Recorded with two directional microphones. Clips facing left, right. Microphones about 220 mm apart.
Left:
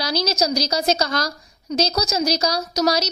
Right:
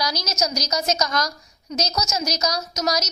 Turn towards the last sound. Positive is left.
turn(degrees=30)  # may be behind; listen again after turning